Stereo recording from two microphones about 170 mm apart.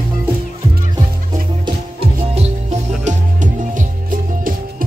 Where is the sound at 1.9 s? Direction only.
40° right (ahead or behind).